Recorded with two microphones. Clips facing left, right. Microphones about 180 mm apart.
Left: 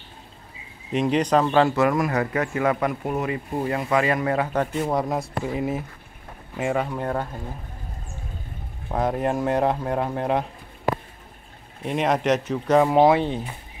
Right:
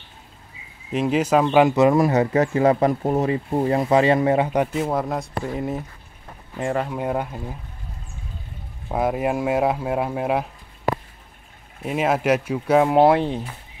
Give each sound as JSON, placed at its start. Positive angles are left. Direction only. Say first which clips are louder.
{"t": 0.9, "sound": "speech", "louder": "right 1 dB", "side_deg": -5}
{"t": 4.7, "sound": "speech", "louder": "right 1 dB", "side_deg": -5}
{"t": 6.9, "sound": "speech", "louder": "right 2 dB", "side_deg": -10}
{"t": 8.9, "sound": "speech", "louder": "right 1 dB", "side_deg": -5}
{"t": 11.8, "sound": "speech", "louder": "right 1 dB", "side_deg": -5}